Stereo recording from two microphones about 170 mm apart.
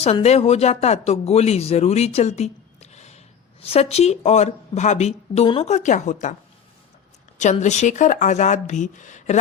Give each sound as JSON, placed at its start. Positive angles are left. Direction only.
{"t": 0.0, "sound": "speech", "side_deg": 40}
{"t": 7.3, "sound": "speech", "side_deg": 45}